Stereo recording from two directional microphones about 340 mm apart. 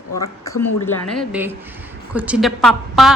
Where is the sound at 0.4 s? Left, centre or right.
Centre.